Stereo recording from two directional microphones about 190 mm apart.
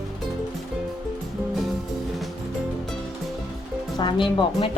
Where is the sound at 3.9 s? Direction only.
25° left (ahead or behind).